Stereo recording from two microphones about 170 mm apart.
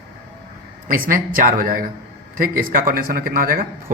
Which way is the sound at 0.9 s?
55° right (ahead or behind).